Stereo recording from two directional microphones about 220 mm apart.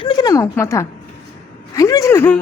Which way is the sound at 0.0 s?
20° left (ahead or behind).